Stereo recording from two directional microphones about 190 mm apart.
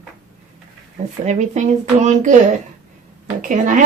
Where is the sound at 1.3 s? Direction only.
40° right (ahead or behind).